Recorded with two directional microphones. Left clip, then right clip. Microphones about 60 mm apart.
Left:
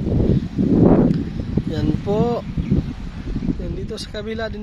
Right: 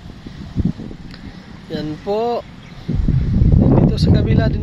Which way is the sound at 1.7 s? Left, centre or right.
Centre.